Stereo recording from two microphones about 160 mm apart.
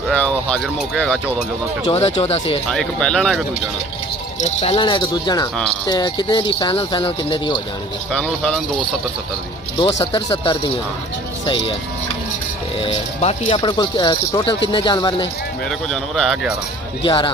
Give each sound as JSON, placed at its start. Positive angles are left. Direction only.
{"t": 0.1, "sound": "speech", "side_deg": 5}
{"t": 1.9, "sound": "speech", "side_deg": 40}
{"t": 2.7, "sound": "speech", "side_deg": 5}
{"t": 4.4, "sound": "speech", "side_deg": 45}
{"t": 8.1, "sound": "speech", "side_deg": 5}
{"t": 10.1, "sound": "speech", "side_deg": 35}
{"t": 12.8, "sound": "speech", "side_deg": 35}
{"t": 15.9, "sound": "speech", "side_deg": 0}
{"t": 17.0, "sound": "speech", "side_deg": 30}